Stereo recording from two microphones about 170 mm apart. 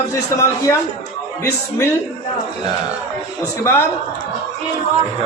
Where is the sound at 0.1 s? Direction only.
15° left (ahead or behind).